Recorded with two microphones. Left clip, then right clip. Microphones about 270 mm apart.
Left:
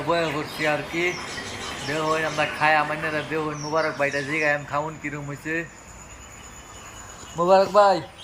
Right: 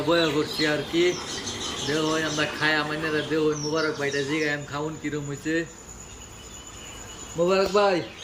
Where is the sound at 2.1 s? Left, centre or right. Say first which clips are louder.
Left 2 dB; centre.